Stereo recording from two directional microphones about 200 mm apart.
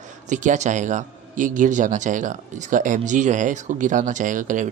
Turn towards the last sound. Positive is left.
turn(degrees=-40)  # may be behind; listen again after turning